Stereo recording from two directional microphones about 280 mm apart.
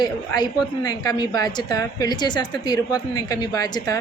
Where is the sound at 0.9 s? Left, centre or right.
Centre.